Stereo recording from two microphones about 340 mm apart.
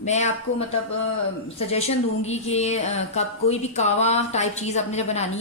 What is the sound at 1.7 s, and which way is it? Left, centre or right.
Speech, centre.